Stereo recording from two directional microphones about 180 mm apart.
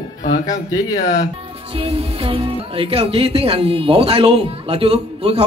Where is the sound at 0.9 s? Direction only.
45° left (ahead or behind).